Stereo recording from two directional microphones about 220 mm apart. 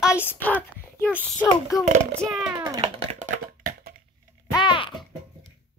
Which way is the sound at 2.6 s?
15° right (ahead or behind).